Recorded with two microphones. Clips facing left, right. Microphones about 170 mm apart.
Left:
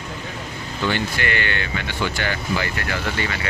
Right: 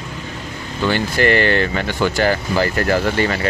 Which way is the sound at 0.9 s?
35° right (ahead or behind).